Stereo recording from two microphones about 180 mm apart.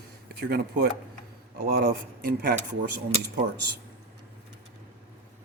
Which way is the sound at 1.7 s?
60° right (ahead or behind).